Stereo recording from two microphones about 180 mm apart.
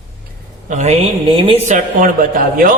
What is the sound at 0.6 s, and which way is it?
A woman's voice, 40° right (ahead or behind).